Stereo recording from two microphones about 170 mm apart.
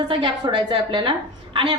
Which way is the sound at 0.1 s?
30° right (ahead or behind).